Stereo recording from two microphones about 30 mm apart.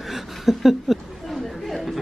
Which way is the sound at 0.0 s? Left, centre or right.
Centre.